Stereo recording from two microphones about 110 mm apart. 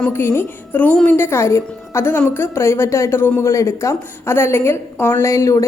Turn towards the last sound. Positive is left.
turn(degrees=30)  # may be behind; listen again after turning